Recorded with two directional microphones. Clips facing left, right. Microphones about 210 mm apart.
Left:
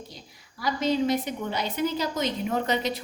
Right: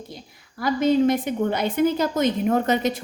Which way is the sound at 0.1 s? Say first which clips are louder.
Right 6 dB; 55° right (ahead or behind).